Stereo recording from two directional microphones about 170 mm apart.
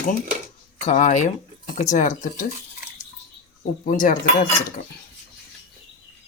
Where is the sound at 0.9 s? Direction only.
45° left (ahead or behind).